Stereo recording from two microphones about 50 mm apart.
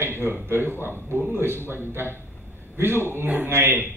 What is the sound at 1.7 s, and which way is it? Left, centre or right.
A man's voice, right.